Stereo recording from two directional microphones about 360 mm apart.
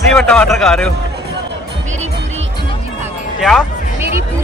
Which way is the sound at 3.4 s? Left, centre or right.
Centre.